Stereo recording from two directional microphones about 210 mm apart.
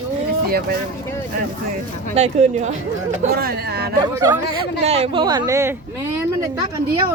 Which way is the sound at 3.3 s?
50° right (ahead or behind).